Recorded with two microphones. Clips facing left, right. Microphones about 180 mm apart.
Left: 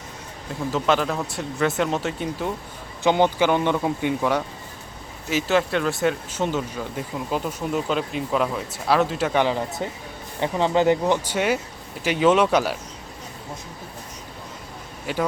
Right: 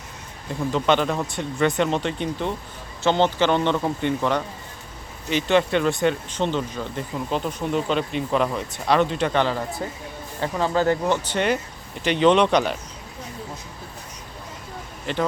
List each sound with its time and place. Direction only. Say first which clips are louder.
0.7 s a man's voice: right 1 dB; centre (ahead or behind)
15.0 s speech: even; 5° left (ahead or behind)